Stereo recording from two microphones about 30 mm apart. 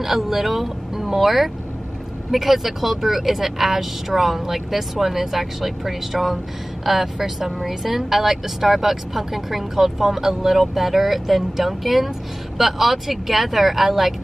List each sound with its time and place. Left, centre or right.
0.0 s speech: centre